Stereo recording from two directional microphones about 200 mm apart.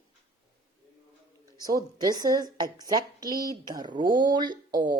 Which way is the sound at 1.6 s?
20° right (ahead or behind).